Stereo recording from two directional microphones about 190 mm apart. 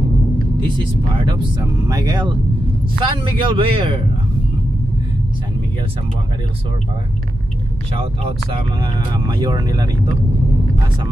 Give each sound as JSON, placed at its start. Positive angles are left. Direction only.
{"t": 0.6, "sound": "speech", "side_deg": -25}
{"t": 8.7, "sound": "speech", "side_deg": -25}